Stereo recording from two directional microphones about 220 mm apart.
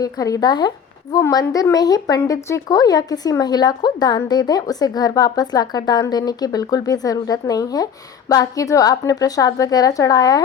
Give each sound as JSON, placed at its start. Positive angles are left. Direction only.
{"t": 0.0, "sound": "speech", "side_deg": 15}